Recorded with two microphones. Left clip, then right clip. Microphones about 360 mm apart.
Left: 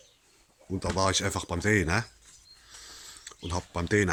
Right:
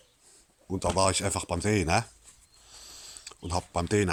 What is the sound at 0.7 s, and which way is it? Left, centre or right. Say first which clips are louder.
Speech: right 1 dB; centre.